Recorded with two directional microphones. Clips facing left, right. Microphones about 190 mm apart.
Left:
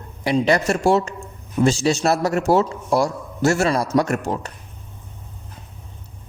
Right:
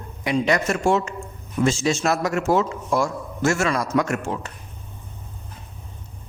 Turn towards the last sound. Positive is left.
turn(degrees=35)  # may be behind; listen again after turning